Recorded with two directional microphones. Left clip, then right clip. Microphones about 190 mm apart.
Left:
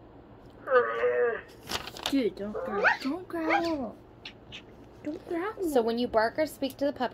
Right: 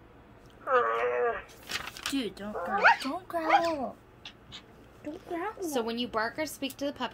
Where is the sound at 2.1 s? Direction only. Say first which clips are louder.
Left 6 dB; 40° right (ahead or behind).